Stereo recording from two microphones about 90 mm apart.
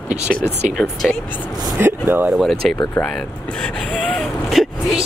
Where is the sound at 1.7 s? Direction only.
25° right (ahead or behind).